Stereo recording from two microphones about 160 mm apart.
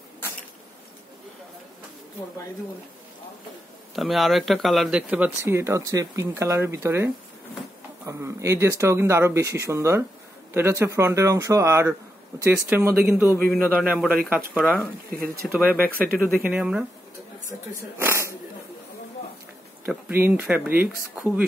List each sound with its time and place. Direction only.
3.9 s speech: centre (ahead or behind)
14.6 s speech: 10° left (ahead or behind)
15.5 s speech: 10° right (ahead or behind)
17.9 s a sound: 15° right (ahead or behind)
19.8 s speech: 15° right (ahead or behind)